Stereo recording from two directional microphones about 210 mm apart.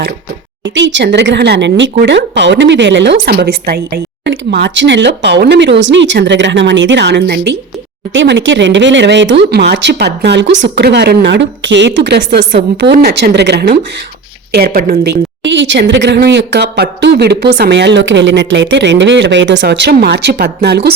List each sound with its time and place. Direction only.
0.6 s speech: 60° right (ahead or behind)